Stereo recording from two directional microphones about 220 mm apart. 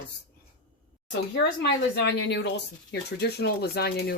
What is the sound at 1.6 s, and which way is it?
Speech, 50° left (ahead or behind).